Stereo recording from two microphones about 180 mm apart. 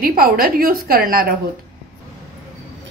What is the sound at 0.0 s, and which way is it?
A woman's voice, 55° right (ahead or behind).